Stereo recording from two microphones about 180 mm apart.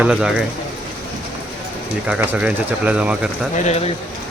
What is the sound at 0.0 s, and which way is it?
Speech, 5° right (ahead or behind).